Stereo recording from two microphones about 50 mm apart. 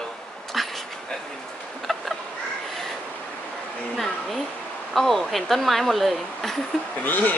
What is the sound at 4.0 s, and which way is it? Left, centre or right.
Speech, centre.